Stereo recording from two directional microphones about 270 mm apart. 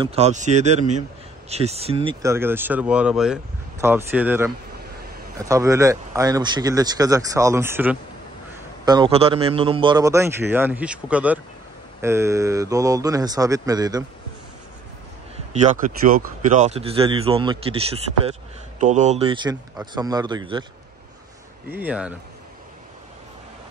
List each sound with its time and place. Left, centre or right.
0.0 s speech: right
2.2 s speech: centre
5.5 s speech: centre
15.5 s speech: right
21.6 s speech: centre